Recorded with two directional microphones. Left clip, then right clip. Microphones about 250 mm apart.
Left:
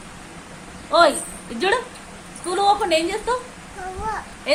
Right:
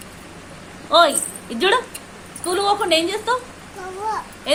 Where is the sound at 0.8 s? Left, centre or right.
Centre.